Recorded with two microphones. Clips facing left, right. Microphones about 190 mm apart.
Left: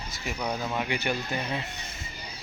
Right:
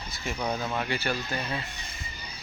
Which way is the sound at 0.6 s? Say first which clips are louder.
Even; 10° left (ahead or behind).